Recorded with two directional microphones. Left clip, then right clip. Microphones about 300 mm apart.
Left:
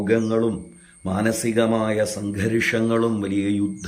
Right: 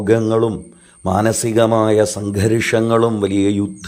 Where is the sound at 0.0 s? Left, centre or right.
Centre.